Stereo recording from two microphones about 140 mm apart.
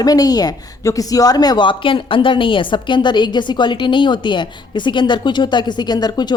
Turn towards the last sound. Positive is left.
turn(degrees=30)  # may be behind; listen again after turning